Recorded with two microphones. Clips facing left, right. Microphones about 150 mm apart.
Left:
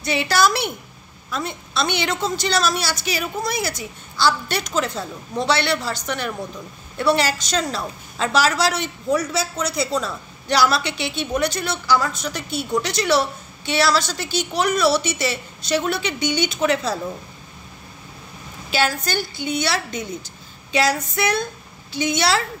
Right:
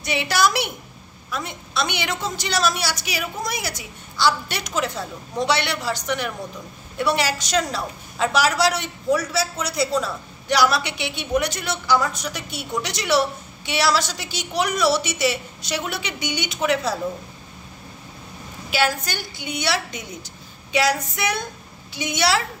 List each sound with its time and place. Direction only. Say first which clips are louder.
0.0 s a woman's voice: left 2 dB; 15° right (ahead or behind)
18.7 s a woman's voice: left 1 dB; 15° right (ahead or behind)